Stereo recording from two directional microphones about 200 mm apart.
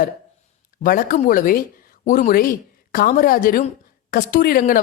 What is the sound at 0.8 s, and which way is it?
A woman's voice, 45° left (ahead or behind).